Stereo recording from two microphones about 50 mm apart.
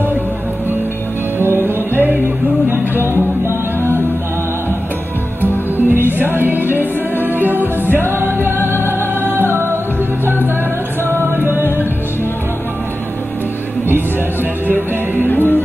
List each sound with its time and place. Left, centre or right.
1.4 s music: right
5.4 s music: right
11.1 s music: right
15.2 s music: left